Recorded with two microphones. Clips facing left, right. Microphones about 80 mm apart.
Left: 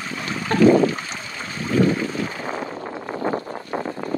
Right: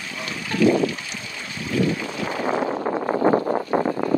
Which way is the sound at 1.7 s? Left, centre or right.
Left.